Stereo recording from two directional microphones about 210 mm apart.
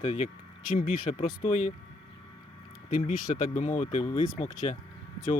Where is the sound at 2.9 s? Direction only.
35° left (ahead or behind).